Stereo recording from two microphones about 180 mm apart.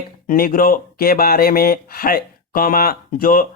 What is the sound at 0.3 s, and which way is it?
Speech, 55° left (ahead or behind).